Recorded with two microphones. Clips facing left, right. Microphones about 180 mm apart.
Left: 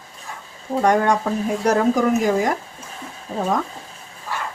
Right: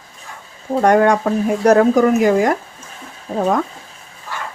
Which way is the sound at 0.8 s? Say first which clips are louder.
Right 5 dB; 60° right (ahead or behind).